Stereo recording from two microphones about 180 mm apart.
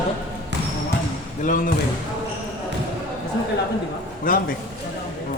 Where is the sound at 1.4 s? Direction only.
50° left (ahead or behind).